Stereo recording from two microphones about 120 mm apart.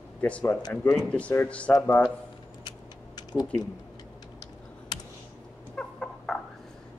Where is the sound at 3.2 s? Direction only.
35° left (ahead or behind).